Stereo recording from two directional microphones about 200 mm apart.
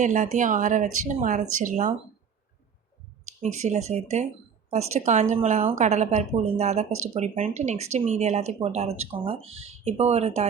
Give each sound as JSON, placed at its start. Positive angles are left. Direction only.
{"t": 0.0, "sound": "speech", "side_deg": -35}
{"t": 3.2, "sound": "speech", "side_deg": -35}